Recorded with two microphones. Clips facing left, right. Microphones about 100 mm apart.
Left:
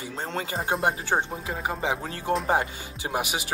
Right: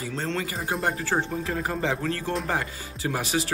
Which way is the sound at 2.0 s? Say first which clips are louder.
Left 1 dB; 30° left (ahead or behind).